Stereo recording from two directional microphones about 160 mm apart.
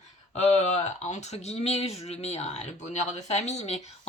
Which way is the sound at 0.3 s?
45° left (ahead or behind).